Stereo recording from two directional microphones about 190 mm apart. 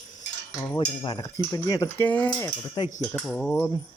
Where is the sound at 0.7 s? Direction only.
25° left (ahead or behind).